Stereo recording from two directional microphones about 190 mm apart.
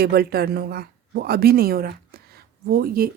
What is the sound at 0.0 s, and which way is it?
Speech, 55° right (ahead or behind).